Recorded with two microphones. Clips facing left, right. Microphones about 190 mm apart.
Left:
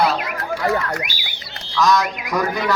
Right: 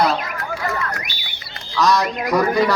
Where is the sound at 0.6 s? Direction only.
60° left (ahead or behind).